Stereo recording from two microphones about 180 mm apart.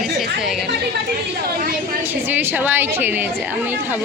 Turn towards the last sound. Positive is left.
turn(degrees=-10)  # may be behind; listen again after turning